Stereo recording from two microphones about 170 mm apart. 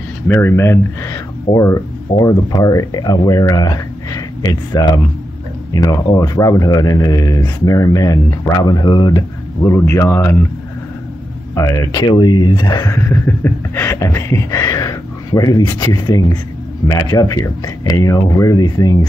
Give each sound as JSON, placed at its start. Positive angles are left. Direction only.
{"t": 0.3, "sound": "speech", "side_deg": 15}
{"t": 9.6, "sound": "speech", "side_deg": 15}
{"t": 11.5, "sound": "speech", "side_deg": 20}